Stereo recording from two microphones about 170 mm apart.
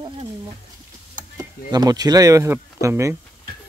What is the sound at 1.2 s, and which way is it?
Speech, 25° right (ahead or behind).